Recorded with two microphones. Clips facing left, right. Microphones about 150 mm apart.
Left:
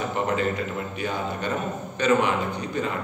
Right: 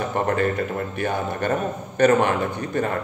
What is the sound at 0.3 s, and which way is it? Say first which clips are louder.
A man's voice: right 3 dB; 55° right (ahead or behind).